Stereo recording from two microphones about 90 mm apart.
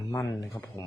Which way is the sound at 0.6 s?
35° left (ahead or behind).